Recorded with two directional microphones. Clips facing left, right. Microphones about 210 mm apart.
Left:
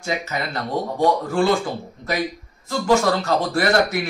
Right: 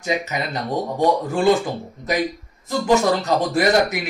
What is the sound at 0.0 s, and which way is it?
Speech, 15° right (ahead or behind).